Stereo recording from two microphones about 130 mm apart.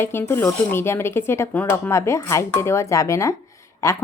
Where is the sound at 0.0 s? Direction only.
20° left (ahead or behind).